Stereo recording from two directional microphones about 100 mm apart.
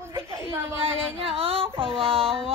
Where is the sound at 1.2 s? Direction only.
70° right (ahead or behind).